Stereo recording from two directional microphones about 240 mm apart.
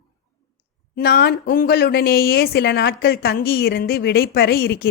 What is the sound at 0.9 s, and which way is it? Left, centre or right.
Speech, left.